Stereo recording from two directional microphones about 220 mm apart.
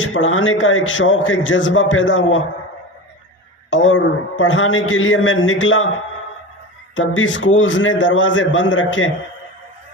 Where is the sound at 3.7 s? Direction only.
60° left (ahead or behind).